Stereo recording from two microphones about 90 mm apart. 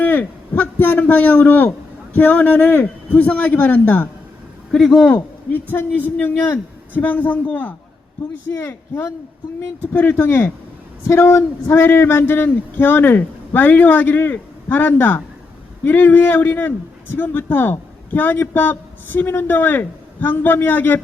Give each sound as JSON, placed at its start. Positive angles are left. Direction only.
{"t": 0.0, "sound": "a man's voice", "side_deg": 20}
{"t": 4.7, "sound": "a man's voice", "side_deg": 5}
{"t": 5.1, "sound": "a man's voice", "side_deg": 20}
{"t": 8.5, "sound": "a man's voice", "side_deg": 30}